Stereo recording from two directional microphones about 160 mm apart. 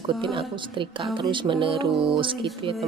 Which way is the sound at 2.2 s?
30° right (ahead or behind).